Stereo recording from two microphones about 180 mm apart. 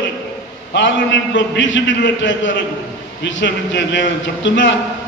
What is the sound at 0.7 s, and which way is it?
A man's voice, 90° left.